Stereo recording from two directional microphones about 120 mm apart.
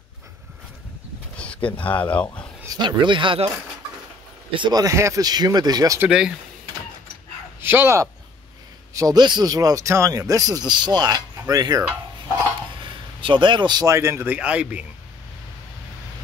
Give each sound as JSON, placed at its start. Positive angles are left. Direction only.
{"t": 1.3, "sound": "speech", "side_deg": 10}
{"t": 2.6, "sound": "speech", "side_deg": -30}
{"t": 4.5, "sound": "speech", "side_deg": -40}
{"t": 6.0, "sound": "speech", "side_deg": -5}
{"t": 7.6, "sound": "speech", "side_deg": -20}
{"t": 8.9, "sound": "speech", "side_deg": -35}
{"t": 12.8, "sound": "a sound", "side_deg": -40}
{"t": 13.8, "sound": "speech", "side_deg": -20}